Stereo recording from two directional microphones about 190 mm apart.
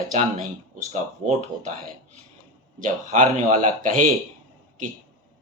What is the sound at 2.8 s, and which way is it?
Speech, 40° right (ahead or behind).